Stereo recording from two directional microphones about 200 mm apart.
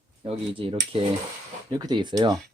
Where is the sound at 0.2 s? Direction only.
25° right (ahead or behind).